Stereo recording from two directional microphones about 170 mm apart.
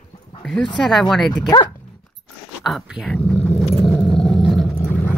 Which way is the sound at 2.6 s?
Centre (ahead or behind).